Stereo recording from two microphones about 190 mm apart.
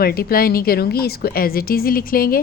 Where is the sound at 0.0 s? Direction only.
55° left (ahead or behind).